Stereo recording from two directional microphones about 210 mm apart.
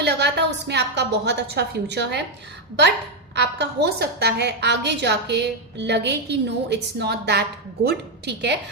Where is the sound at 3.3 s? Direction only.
55° right (ahead or behind).